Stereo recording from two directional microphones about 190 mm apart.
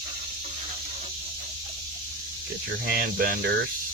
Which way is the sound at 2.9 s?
50° right (ahead or behind).